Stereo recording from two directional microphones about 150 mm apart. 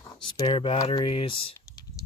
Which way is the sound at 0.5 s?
35° left (ahead or behind).